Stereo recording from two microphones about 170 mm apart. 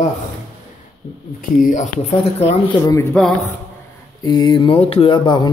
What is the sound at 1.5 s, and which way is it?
Speech, 50° left (ahead or behind).